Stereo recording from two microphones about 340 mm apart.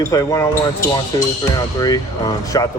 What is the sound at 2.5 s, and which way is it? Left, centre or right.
Speech, centre.